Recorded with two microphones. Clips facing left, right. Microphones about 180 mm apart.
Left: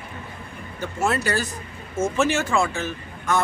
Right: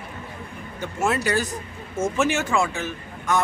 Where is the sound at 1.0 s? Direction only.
15° right (ahead or behind).